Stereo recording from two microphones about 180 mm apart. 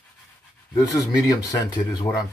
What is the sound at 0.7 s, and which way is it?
Speech, 20° left (ahead or behind).